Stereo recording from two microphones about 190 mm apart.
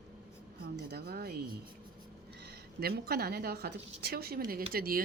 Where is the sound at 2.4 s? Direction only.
55° right (ahead or behind).